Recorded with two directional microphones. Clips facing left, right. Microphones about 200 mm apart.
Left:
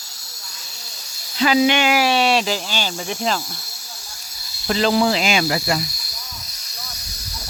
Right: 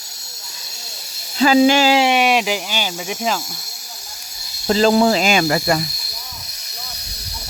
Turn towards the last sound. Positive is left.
turn(degrees=-50)  # may be behind; listen again after turning